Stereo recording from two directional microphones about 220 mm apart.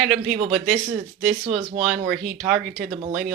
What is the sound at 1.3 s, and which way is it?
Speech, 25° right (ahead or behind).